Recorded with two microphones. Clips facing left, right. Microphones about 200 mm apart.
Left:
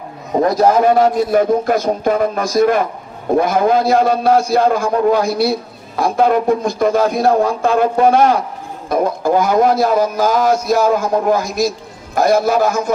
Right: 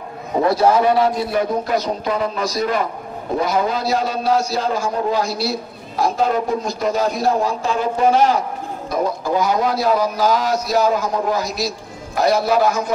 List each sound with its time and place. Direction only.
0.5 s a man's voice: 45° left (ahead or behind)